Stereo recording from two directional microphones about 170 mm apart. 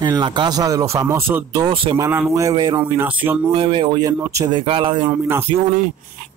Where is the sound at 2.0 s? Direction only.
15° right (ahead or behind).